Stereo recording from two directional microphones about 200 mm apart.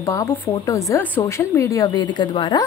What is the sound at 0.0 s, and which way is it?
Speech, 15° left (ahead or behind).